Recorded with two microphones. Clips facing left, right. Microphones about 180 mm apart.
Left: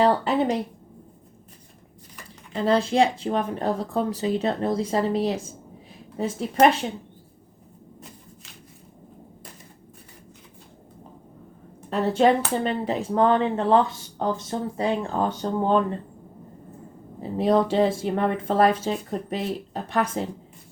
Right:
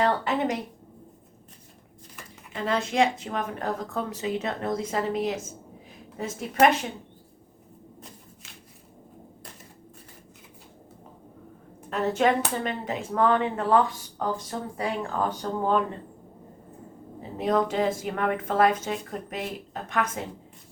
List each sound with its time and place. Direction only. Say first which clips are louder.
0.0 s speech: left 4 dB; 30° left (ahead or behind)
2.5 s speech: left 6 dB; 35° left (ahead or behind)
11.9 s speech: left 4 dB; 30° left (ahead or behind)
17.3 s speech: left 4 dB; 30° left (ahead or behind)